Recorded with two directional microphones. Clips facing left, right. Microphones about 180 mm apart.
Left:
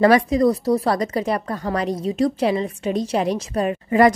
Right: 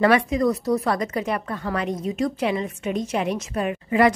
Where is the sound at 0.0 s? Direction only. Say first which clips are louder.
Left 4 dB; 35° left (ahead or behind).